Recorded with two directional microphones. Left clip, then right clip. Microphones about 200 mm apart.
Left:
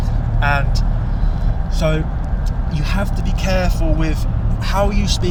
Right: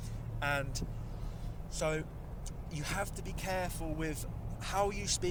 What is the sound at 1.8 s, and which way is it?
Speech, 50° right (ahead or behind).